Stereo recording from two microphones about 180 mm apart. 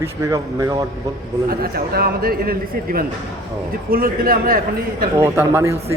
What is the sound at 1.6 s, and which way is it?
A man's voice, 60° right (ahead or behind).